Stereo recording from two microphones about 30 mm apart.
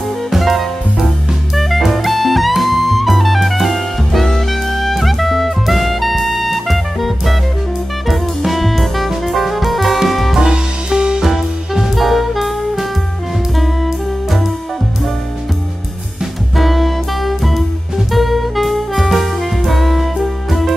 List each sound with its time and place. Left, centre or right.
0.3 s music: centre
1.5 s jazz: centre
1.9 s music: centre
10.4 s music: right
11.3 s music: centre
11.9 s saxophone: centre
13.6 s music: centre
16.5 s music: centre
18.1 s saxophone: centre